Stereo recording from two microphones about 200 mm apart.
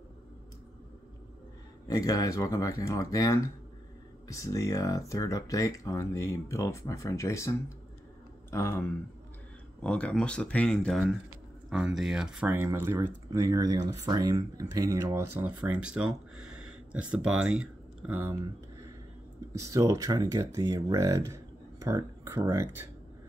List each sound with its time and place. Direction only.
1.9 s speech: 15° left (ahead or behind); by 18.3 s 10° right (ahead or behind)
19.5 s speech: 15° right (ahead or behind)